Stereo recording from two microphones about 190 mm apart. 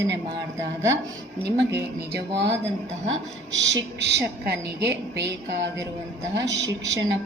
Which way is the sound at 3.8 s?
65° right (ahead or behind).